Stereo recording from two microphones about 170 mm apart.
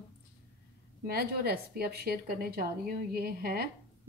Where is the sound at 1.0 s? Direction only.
65° right (ahead or behind).